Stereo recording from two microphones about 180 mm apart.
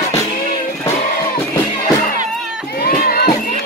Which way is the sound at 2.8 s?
60° left (ahead or behind).